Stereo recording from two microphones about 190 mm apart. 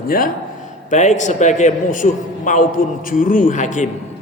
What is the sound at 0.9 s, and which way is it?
A man's voice, 40° left (ahead or behind).